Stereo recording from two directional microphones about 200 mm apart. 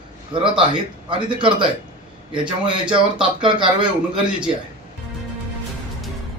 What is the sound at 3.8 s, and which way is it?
Speech, 5° right (ahead or behind).